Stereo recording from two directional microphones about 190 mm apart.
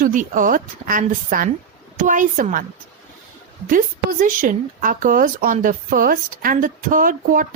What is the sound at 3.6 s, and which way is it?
Speech, 45° right (ahead or behind).